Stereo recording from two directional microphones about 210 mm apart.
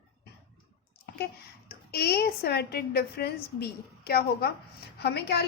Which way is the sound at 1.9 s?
50° left (ahead or behind).